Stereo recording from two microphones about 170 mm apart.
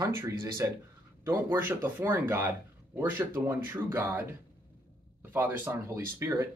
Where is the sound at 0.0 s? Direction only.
20° right (ahead or behind).